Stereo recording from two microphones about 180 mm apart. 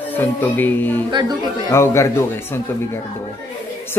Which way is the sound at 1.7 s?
15° left (ahead or behind).